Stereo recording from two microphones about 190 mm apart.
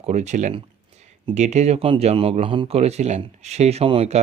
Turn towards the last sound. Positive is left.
turn(degrees=-30)  # may be behind; listen again after turning